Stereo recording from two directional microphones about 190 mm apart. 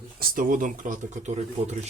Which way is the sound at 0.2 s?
45° right (ahead or behind).